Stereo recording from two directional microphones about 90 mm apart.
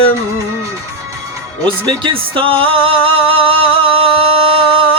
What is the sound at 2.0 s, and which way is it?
Music, 80° right.